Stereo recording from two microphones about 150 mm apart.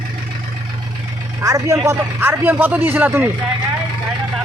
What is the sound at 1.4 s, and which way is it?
A man's voice, 20° right (ahead or behind).